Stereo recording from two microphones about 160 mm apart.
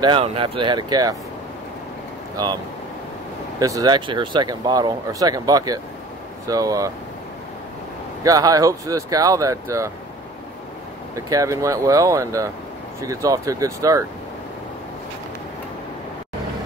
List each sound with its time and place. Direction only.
0.0 s speech: 35° right (ahead or behind)
2.3 s speech: 25° right (ahead or behind)
8.2 s speech: 20° right (ahead or behind)
11.1 s speech: 20° right (ahead or behind)